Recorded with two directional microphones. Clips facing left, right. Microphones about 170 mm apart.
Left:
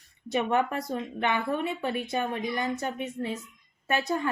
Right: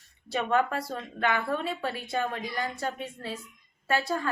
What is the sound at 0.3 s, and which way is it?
A woman's voice, 20° left (ahead or behind).